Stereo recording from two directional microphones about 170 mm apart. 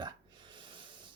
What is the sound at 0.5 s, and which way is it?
Snort, 30° right (ahead or behind).